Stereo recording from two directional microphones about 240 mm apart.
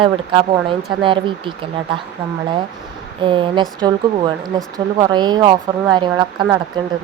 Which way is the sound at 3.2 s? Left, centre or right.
Right.